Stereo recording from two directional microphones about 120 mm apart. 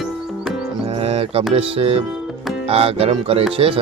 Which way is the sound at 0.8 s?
55° right (ahead or behind).